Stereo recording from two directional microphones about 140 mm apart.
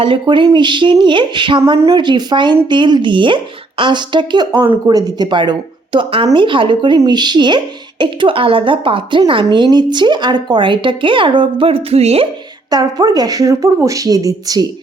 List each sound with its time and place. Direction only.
0.0 s speech: 35° right (ahead or behind)
12.7 s a woman's voice: 30° right (ahead or behind)